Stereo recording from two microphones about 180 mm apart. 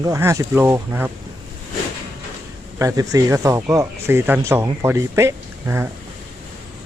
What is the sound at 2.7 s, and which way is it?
Speech, 20° right (ahead or behind).